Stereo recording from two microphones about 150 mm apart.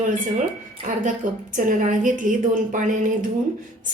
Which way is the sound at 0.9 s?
60° right (ahead or behind).